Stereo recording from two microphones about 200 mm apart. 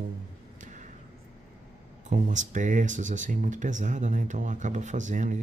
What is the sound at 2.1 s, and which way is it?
Speech, 40° right (ahead or behind).